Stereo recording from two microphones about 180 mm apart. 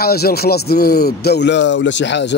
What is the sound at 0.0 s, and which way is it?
Speech, 60° left (ahead or behind).